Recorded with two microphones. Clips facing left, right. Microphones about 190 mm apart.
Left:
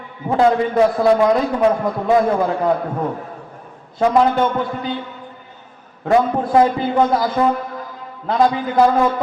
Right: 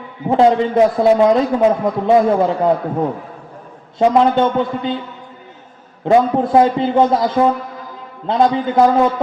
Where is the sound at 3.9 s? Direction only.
25° right (ahead or behind).